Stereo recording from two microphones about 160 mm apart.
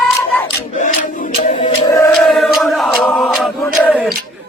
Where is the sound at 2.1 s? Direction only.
Centre (ahead or behind).